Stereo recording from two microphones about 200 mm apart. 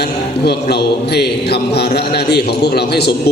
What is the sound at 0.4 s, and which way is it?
Speech, 55° left (ahead or behind).